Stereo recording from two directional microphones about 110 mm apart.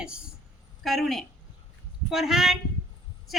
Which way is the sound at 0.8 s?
Centre (ahead or behind).